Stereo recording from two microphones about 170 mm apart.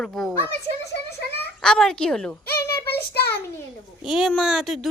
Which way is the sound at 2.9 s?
70° left (ahead or behind).